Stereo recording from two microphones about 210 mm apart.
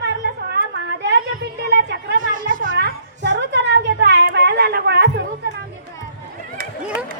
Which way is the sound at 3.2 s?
55° right (ahead or behind).